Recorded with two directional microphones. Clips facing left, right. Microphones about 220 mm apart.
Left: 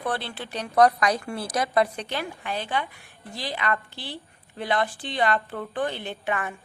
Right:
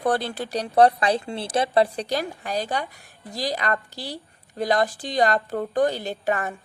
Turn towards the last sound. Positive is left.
turn(degrees=-40)  # may be behind; listen again after turning